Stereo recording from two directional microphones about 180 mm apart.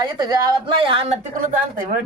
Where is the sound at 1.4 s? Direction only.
50° right (ahead or behind).